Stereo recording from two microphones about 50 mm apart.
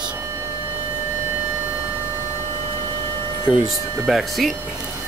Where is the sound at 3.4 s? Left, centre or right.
Centre.